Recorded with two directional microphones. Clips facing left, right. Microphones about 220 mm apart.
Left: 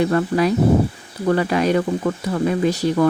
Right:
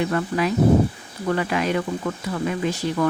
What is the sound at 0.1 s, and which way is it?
Speech, 40° left (ahead or behind).